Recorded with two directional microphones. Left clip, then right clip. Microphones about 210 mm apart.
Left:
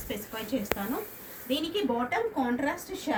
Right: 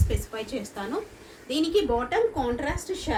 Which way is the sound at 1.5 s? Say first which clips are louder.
Right 5 dB; 30° right (ahead or behind).